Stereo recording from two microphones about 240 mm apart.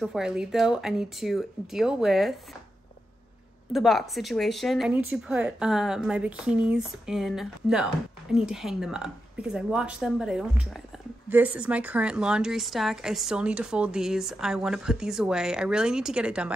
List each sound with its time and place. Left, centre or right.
0.0 s speech: centre
3.7 s speech: centre